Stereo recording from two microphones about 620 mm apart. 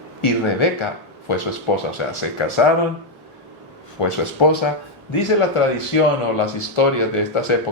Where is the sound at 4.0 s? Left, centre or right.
Left.